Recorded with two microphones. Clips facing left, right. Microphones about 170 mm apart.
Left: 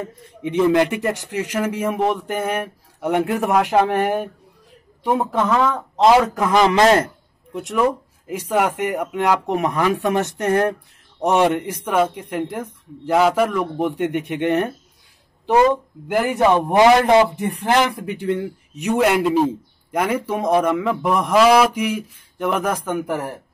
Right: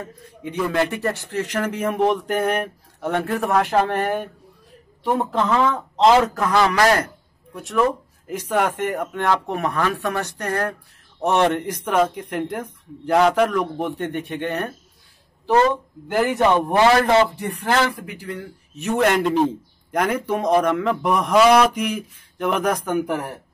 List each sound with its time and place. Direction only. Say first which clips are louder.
0.0 s speech: left 5 dB; 20° left (ahead or behind)
5.1 s a man's voice: left 1 dB; 10° left (ahead or behind); by 18.5 s 25° left (ahead or behind)
18.8 s a man's voice: left 2 dB; 10° left (ahead or behind)